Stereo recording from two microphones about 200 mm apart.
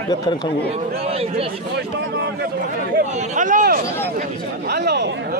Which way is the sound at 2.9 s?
40° right (ahead or behind).